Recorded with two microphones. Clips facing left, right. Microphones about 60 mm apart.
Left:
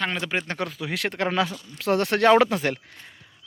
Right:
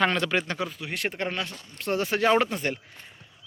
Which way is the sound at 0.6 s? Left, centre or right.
Left.